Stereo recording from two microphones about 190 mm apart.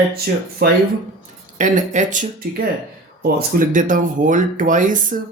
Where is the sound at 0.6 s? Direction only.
55° right (ahead or behind).